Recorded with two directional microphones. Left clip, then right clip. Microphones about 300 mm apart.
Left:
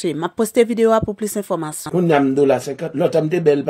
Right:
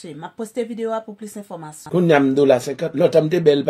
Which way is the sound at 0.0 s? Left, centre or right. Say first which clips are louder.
Left 11 dB; left.